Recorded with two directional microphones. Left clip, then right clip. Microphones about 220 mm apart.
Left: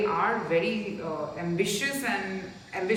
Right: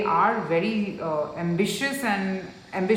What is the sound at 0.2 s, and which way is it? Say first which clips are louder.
A woman's voice: right 3 dB; 20° right (ahead or behind).